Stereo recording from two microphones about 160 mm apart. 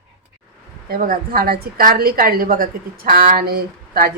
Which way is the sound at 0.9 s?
60° right (ahead or behind).